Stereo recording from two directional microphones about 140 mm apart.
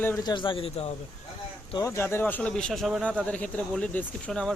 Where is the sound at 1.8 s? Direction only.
20° left (ahead or behind).